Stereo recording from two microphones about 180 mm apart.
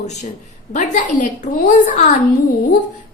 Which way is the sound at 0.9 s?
45° left (ahead or behind).